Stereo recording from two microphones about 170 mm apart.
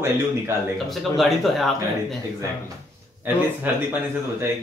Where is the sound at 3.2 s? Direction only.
10° right (ahead or behind).